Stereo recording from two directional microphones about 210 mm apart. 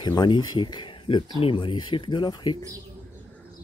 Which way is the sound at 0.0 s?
20° left (ahead or behind).